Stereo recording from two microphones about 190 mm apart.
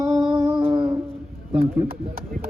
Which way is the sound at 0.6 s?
25° right (ahead or behind).